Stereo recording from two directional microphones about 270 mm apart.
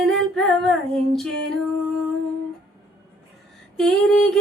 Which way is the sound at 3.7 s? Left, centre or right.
Centre.